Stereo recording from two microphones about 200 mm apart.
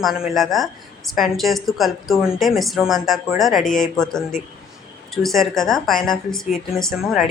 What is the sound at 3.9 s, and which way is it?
Speech, 5° left (ahead or behind).